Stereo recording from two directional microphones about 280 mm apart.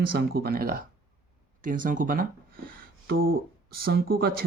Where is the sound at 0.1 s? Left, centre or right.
Right.